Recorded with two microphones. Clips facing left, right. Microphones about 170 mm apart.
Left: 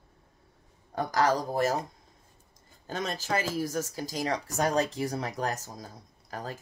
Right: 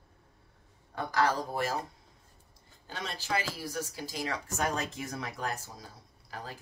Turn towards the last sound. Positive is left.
turn(degrees=45)  # may be behind; listen again after turning